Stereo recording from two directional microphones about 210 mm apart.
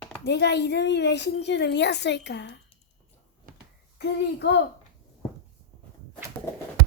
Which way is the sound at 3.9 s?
55° left (ahead or behind).